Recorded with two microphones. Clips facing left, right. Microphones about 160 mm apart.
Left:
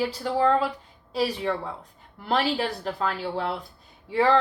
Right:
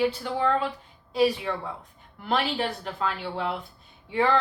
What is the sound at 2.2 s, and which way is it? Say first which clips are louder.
A woman's voice: left 2 dB; 35° left (ahead or behind).